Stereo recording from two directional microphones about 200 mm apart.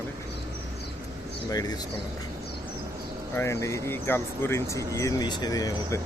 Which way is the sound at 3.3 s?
15° left (ahead or behind).